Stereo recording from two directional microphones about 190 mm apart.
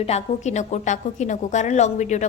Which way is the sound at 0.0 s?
35° left (ahead or behind).